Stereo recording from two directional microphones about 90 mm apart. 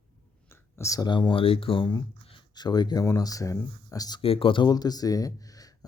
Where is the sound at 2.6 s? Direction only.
50° left (ahead or behind).